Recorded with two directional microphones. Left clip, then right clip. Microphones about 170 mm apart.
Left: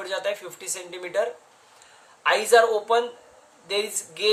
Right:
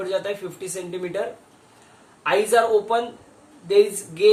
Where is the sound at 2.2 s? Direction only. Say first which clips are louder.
Left 1 dB; 40° left (ahead or behind).